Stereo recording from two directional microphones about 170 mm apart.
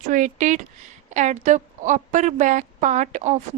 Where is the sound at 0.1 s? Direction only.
50° right (ahead or behind).